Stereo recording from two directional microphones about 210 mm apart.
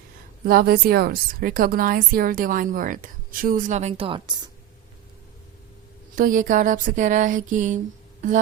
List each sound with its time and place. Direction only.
0.4 s a woman's voice: 45° right (ahead or behind); by 4.4 s 20° right (ahead or behind)
6.1 s a woman's voice: 40° right (ahead or behind)